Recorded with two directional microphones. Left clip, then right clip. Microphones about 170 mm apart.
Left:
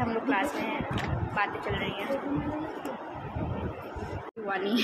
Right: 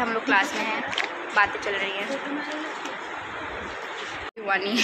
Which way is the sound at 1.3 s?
10° right (ahead or behind).